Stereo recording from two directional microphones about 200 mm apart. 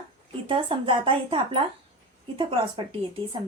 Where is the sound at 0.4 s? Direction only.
25° right (ahead or behind).